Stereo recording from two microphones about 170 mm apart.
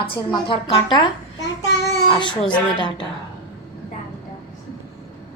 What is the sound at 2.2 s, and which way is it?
Speech, 30° left (ahead or behind).